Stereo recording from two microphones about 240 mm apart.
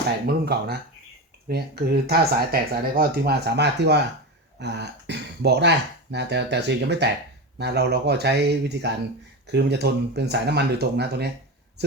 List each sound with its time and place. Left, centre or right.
0.3 s speech: right